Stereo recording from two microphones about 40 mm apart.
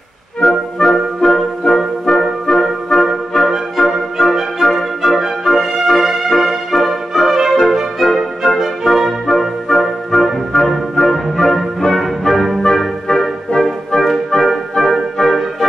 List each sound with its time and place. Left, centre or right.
0.4 s music: centre
1.6 s music: centre
5.2 s music: centre
9.3 s music: centre